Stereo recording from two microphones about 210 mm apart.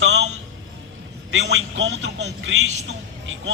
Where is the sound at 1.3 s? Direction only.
60° right (ahead or behind).